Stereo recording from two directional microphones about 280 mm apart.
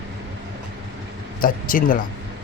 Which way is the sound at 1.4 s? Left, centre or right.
Left.